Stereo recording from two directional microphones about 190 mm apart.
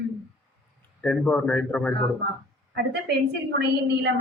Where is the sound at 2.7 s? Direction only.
60° right (ahead or behind).